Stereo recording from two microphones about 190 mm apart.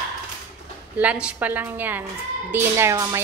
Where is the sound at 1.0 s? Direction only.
5° right (ahead or behind).